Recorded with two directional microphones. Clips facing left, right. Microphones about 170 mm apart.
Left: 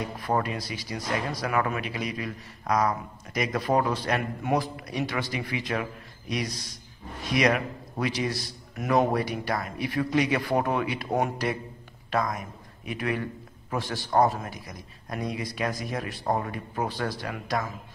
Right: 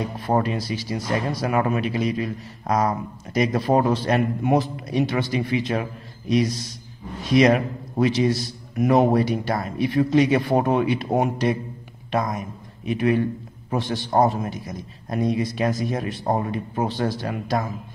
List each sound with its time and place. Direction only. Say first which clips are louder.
0.2 s a man's voice: right 5 dB; 30° right (ahead or behind)